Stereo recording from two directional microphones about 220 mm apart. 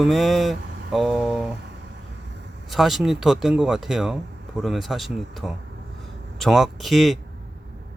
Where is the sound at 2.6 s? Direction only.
Centre (ahead or behind).